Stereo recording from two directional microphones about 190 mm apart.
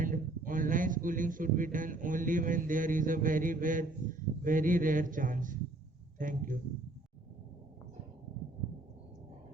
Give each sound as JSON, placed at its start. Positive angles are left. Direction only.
{"t": 0.0, "sound": "a man's voice", "side_deg": -45}